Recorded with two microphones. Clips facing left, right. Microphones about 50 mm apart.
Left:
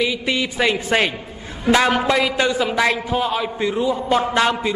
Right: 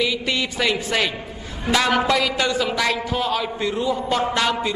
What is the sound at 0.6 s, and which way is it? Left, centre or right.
Speech, left.